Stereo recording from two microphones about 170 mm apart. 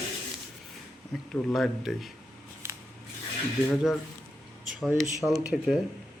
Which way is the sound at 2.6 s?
15° right (ahead or behind).